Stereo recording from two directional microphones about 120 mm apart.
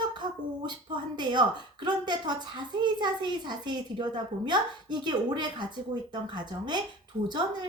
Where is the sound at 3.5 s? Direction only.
40° right (ahead or behind).